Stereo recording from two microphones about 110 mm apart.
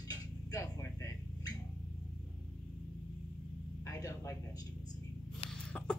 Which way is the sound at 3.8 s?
30° left (ahead or behind).